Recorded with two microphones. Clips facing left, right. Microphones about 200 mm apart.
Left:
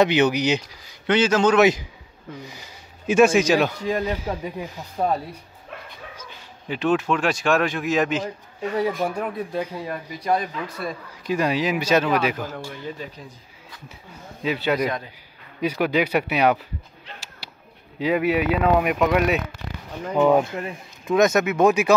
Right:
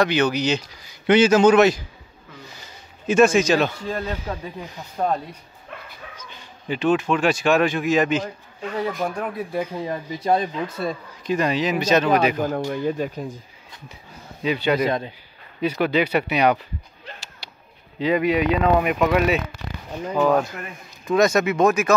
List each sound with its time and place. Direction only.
0.0 s a man's voice: 20° left (ahead or behind)
1.0 s a man's voice: 10° right (ahead or behind)
1.6 s a man's voice: 15° left (ahead or behind)
9.5 s a man's voice: 15° right (ahead or behind)
11.2 s a man's voice: 10° left (ahead or behind)
12.4 s speech: 45° right (ahead or behind)
14.4 s a man's voice: 5° left (ahead or behind)
17.4 s a sound: 5° left (ahead or behind)
17.9 s a man's voice: 5° left (ahead or behind)
20.2 s speech: 20° left (ahead or behind)
21.0 s speech: 5° left (ahead or behind)